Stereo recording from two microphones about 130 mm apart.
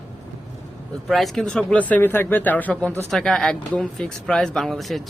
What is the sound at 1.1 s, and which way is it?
Speech, centre (ahead or behind).